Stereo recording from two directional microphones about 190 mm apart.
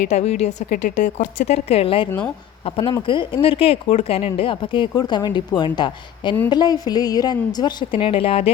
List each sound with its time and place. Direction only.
0.0 s a woman's voice: 35° left (ahead or behind)